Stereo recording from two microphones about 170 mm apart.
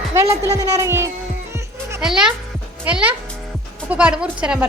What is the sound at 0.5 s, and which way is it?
Speech, 20° right (ahead or behind).